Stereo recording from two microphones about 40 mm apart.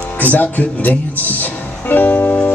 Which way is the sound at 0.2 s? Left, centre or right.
Left.